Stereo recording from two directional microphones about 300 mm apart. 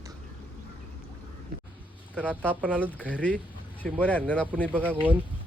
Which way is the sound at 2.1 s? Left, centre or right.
Centre.